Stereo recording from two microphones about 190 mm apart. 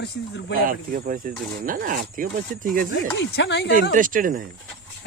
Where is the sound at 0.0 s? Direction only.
65° left (ahead or behind).